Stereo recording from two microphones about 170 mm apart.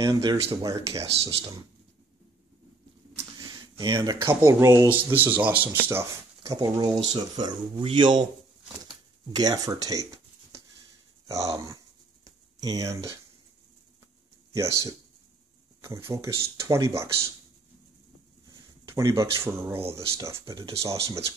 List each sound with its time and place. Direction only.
0.0 s speech: 20° right (ahead or behind)
3.3 s speech: 25° right (ahead or behind)
9.3 s speech: 20° right (ahead or behind)
12.3 s a sound: 20° right (ahead or behind)
14.5 s speech: 15° right (ahead or behind)
18.9 s speech: 20° right (ahead or behind)